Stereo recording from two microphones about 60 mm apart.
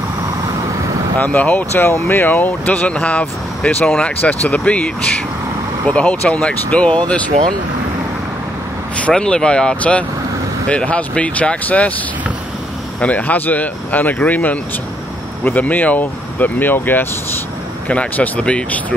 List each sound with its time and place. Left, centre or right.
1.1 s speech: left
1.8 s speech: left
9.1 s speech: centre
13.0 s speech: left
17.8 s speech: left